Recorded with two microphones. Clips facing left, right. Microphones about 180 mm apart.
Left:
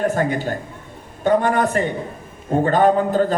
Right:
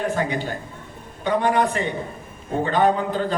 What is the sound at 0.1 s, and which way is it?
A man's voice, 45° left (ahead or behind).